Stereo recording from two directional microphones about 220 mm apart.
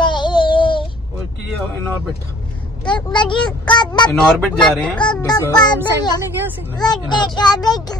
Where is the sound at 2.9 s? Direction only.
20° left (ahead or behind).